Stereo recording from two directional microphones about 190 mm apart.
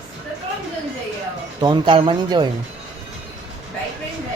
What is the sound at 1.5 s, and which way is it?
Speech, 20° right (ahead or behind).